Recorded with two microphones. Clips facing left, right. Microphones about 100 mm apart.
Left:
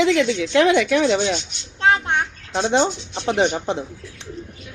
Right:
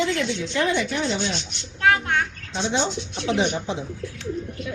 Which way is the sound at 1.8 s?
25° left (ahead or behind).